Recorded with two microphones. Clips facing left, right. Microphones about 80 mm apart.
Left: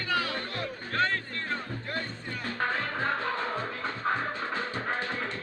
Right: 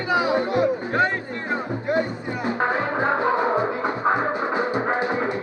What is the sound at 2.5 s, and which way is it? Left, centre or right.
Music, right.